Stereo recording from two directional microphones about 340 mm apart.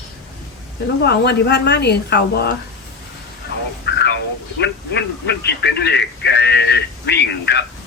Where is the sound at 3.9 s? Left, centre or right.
Left.